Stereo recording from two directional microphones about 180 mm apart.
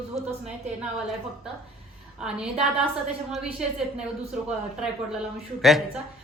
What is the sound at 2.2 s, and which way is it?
Speech, 5° right (ahead or behind).